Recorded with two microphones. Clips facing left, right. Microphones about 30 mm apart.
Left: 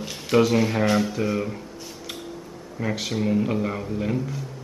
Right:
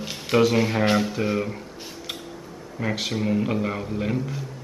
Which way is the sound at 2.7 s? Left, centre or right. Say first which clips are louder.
Even; centre.